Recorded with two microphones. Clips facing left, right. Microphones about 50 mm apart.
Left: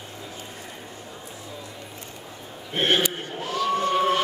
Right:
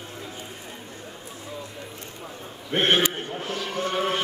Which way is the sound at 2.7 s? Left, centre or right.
Right.